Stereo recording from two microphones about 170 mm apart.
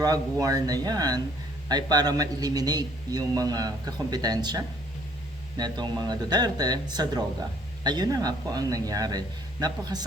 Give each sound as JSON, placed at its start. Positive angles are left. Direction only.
{"t": 0.0, "sound": "a man's voice", "side_deg": -20}